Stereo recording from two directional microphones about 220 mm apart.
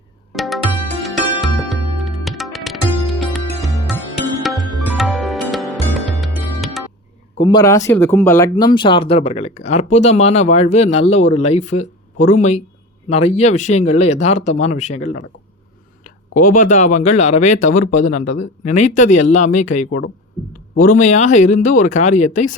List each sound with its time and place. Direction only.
0.3 s music: centre (ahead or behind)
7.3 s a sound: 20° left (ahead or behind)
7.9 s speech: 10° left (ahead or behind); by 22.5 s 35° left (ahead or behind)